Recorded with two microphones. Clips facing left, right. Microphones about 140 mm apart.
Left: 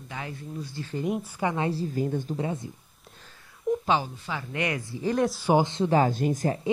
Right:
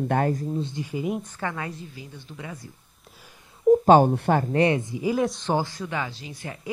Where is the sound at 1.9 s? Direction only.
50° left (ahead or behind).